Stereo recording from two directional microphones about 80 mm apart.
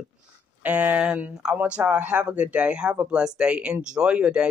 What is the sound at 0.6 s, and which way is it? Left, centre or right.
Speech, centre.